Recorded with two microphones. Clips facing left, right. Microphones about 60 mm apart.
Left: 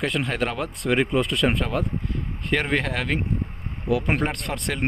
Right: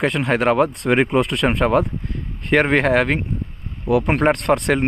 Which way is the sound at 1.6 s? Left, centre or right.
Right.